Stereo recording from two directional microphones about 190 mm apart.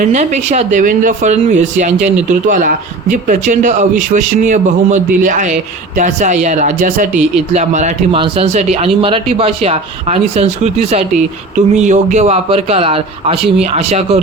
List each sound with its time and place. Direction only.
0.1 s speech: 40° right (ahead or behind)